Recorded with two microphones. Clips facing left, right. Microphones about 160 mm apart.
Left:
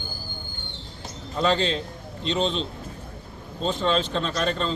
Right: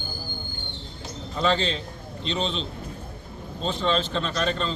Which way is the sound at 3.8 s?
Centre (ahead or behind).